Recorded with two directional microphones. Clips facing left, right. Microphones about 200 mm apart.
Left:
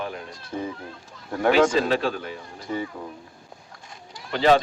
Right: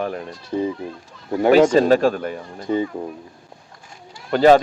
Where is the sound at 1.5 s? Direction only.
45° right (ahead or behind).